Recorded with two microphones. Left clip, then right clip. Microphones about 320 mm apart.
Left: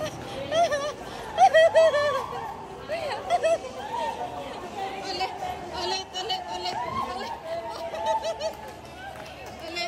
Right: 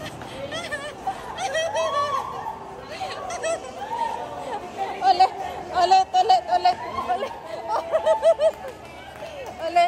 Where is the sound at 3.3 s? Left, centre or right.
Centre.